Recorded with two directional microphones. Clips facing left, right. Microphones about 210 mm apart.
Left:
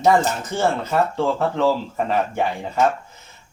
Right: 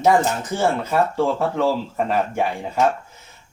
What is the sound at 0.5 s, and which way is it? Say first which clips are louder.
Speech: even; 10° right (ahead or behind).